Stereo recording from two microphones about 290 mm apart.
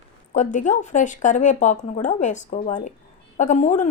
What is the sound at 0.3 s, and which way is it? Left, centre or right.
Speech, left.